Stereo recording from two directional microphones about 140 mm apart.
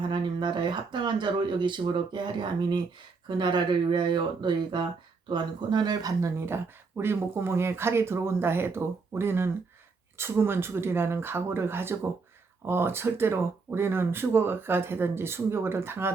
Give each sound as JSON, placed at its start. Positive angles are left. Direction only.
{"t": 0.1, "sound": "speech", "side_deg": -35}